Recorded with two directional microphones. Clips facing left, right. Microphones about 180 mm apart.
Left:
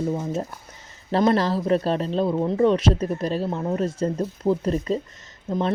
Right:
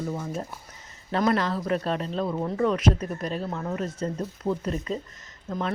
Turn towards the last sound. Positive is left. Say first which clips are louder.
# left 6 dB
turn(degrees=25)  # may be behind; listen again after turning